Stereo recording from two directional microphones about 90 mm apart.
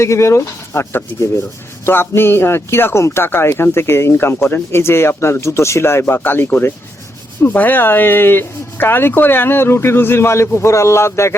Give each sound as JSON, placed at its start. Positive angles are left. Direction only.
{"t": 0.0, "sound": "a man's voice", "side_deg": 30}